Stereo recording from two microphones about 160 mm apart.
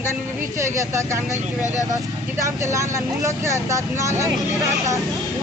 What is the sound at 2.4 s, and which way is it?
Speech, 20° right (ahead or behind).